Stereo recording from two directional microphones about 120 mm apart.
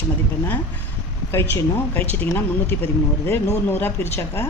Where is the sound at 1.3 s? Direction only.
20° left (ahead or behind).